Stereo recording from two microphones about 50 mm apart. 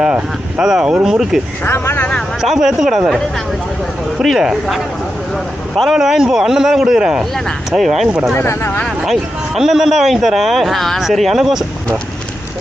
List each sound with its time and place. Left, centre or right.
0.6 s speech: centre
1.6 s speech: left
2.4 s speech: centre
4.2 s a man's voice: centre
5.7 s speech: centre
7.8 s a man's voice: centre
8.4 s speech: left
9.6 s a man's voice: centre